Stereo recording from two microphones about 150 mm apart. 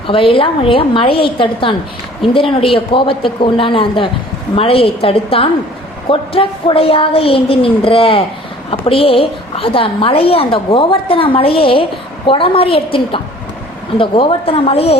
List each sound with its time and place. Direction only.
0.1 s a woman's voice: 35° left (ahead or behind)